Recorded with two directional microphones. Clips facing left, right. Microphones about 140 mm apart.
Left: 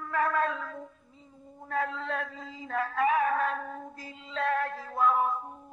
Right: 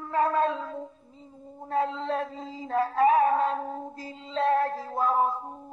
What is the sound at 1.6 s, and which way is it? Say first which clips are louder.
Music: right 4 dB; 30° right (ahead or behind).